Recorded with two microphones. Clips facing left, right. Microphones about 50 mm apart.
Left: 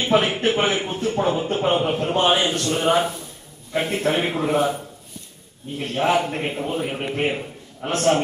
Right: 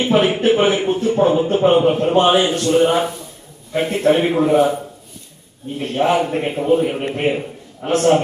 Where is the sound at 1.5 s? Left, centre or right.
Right.